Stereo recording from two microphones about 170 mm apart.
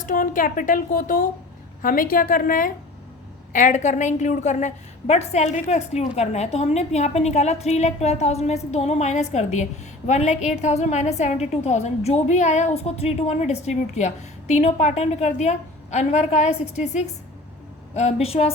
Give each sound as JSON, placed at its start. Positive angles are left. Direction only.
{"t": 0.0, "sound": "a woman's voice", "side_deg": 50}